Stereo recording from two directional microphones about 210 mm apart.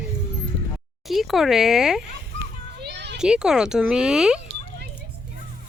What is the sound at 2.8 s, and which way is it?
Children playing, 55° right (ahead or behind).